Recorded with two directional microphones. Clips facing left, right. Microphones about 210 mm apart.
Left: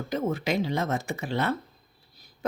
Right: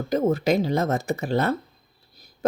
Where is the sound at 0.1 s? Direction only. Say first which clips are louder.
Right 7 dB; 40° right (ahead or behind).